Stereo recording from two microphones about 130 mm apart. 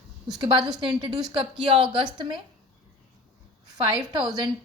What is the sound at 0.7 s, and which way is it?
A woman's voice, 40° right (ahead or behind).